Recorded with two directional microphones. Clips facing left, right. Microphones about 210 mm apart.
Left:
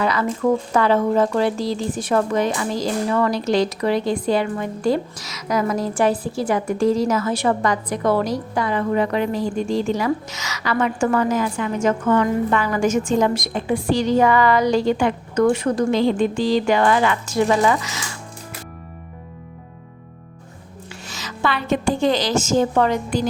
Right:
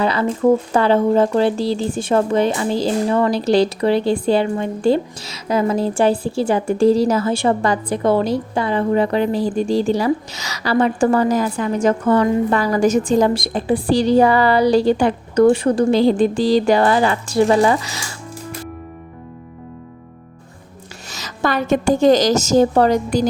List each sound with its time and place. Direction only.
0.0 s a woman's voice: 30° right (ahead or behind)
21.1 s a woman's voice: 40° right (ahead or behind)